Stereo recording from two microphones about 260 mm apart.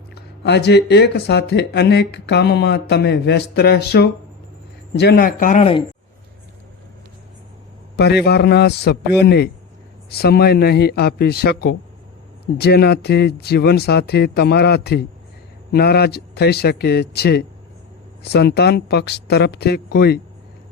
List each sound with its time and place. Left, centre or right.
0.1 s speech: left
7.9 s speech: left